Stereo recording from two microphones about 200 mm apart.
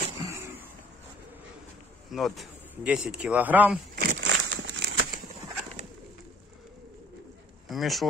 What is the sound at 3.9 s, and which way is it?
Crumpling, 60° right (ahead or behind).